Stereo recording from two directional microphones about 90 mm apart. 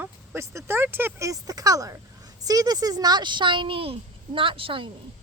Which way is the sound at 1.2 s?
40° right (ahead or behind).